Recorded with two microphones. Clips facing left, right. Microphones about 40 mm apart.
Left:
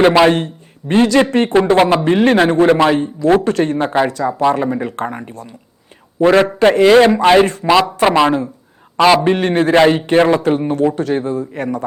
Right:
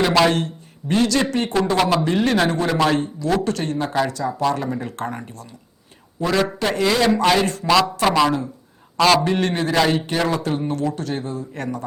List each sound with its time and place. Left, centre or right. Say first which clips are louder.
0.1 s a man's voice: left 6 dB; left